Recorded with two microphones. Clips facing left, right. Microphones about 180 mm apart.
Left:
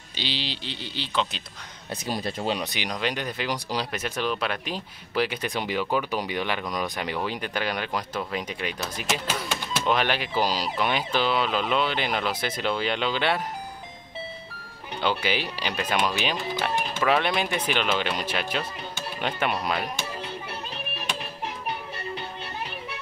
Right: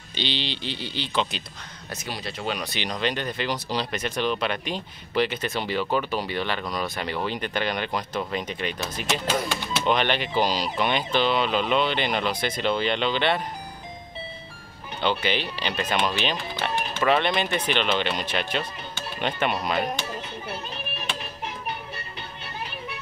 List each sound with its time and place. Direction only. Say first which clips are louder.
0.1 s speech: right 3 dB; 5° left (ahead or behind)
1.9 s speech: left 4 dB; 45° left (ahead or behind)
2.4 s speech: even; 30° left (ahead or behind)
2.7 s speech: right 2 dB; 10° left (ahead or behind)
15.0 s speech: right 1 dB; 10° left (ahead or behind)